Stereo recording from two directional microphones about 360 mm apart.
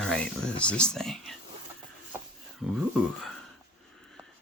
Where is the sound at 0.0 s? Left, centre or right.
Centre.